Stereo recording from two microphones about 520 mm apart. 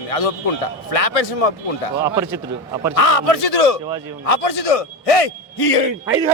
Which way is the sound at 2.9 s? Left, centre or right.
Left.